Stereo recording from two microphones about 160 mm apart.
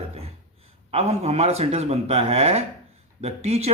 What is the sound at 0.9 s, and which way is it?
Speech, 40° right (ahead or behind).